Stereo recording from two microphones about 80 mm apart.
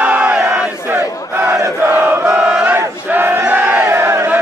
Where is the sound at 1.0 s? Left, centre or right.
Right.